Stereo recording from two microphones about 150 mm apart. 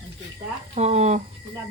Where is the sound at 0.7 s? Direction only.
50° right (ahead or behind).